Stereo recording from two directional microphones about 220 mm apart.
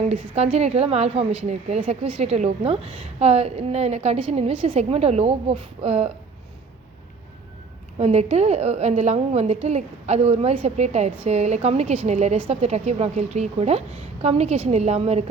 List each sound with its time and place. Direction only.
0.1 s a woman's voice: 30° right (ahead or behind)
7.9 s a woman's voice: 30° right (ahead or behind)